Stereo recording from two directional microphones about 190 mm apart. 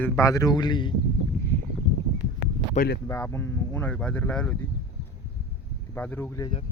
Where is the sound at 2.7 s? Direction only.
55° left (ahead or behind).